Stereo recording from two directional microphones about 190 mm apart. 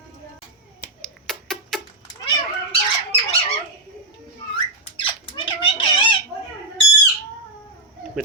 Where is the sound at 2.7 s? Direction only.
30° left (ahead or behind).